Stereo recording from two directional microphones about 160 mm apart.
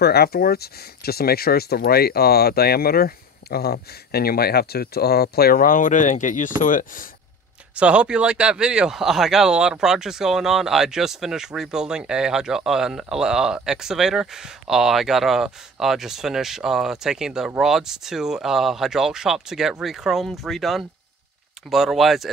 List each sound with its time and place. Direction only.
0.0 s speech: 80° left; by 7.1 s 55° left (ahead or behind)
7.7 s speech: 5° right (ahead or behind)